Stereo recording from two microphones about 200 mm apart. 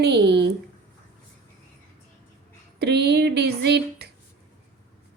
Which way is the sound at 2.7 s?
55° right (ahead or behind).